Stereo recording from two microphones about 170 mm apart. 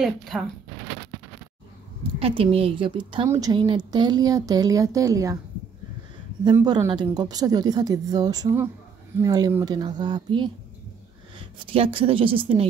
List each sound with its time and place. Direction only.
0.0 s speech: centre (ahead or behind)
2.1 s a woman's voice: 35° right (ahead or behind)
6.5 s a woman's voice: 20° right (ahead or behind)